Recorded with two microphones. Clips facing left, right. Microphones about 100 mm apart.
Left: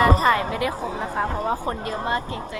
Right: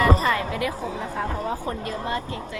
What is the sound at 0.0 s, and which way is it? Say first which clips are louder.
A woman's voice: left 3 dB; 50° left (ahead or behind).